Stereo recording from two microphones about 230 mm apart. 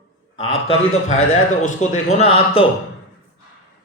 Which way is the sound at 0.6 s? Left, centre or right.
Left.